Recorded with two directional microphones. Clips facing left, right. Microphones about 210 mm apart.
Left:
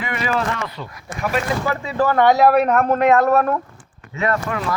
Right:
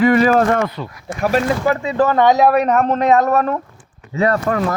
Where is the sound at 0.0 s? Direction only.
40° right (ahead or behind).